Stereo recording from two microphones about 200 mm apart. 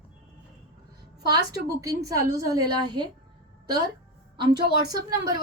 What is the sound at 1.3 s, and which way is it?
A woman's voice, 20° right (ahead or behind).